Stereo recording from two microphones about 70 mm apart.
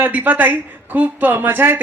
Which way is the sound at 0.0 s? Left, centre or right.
Right.